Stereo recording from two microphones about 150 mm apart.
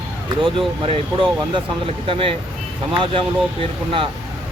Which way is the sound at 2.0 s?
35° right (ahead or behind).